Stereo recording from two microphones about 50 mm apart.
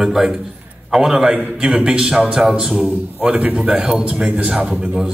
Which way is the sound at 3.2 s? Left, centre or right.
Right.